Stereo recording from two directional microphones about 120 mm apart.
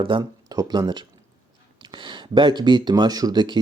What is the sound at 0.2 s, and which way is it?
Speech, 30° right (ahead or behind).